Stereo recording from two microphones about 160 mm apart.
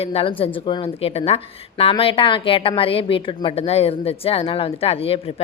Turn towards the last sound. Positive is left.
turn(degrees=35)  # may be behind; listen again after turning